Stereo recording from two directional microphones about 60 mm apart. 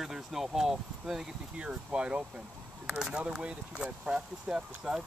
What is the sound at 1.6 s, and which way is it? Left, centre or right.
Speech, centre.